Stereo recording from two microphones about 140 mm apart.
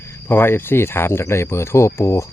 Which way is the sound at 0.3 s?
15° left (ahead or behind).